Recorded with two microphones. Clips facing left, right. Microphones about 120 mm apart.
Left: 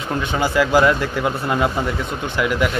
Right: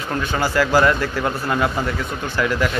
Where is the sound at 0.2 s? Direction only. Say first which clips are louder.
Left 1 dB; 20° left (ahead or behind).